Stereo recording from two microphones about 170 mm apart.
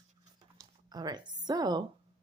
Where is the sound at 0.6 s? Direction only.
25° right (ahead or behind).